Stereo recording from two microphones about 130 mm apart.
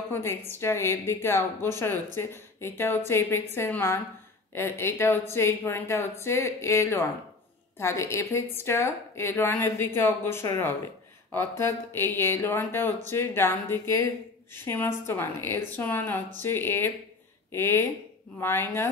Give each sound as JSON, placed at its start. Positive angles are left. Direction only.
{"t": 0.1, "sound": "a woman's voice", "side_deg": 20}